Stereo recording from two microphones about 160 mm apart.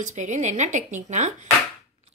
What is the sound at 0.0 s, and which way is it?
Speech, 50° right (ahead or behind).